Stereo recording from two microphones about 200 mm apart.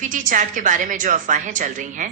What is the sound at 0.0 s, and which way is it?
A woman's voice, 40° right (ahead or behind).